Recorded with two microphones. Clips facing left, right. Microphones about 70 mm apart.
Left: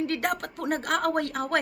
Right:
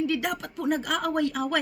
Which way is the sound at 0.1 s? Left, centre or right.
Left.